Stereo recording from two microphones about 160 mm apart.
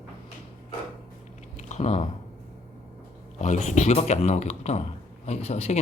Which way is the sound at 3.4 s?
50° left (ahead or behind).